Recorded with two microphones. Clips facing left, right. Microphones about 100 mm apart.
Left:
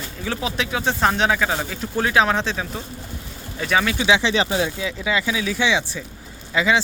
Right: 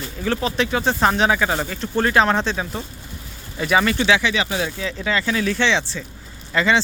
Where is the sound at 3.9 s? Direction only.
15° left (ahead or behind).